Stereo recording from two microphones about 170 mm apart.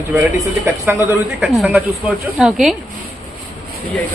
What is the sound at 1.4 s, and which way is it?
A woman's voice, centre (ahead or behind).